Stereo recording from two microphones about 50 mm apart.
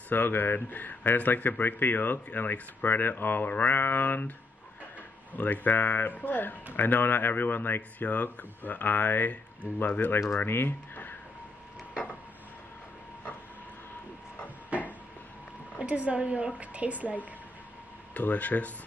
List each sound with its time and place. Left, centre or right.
0.1 s speech: left
5.3 s speech: left
14.7 s a sound: right
15.8 s a woman's voice: right
18.1 s speech: left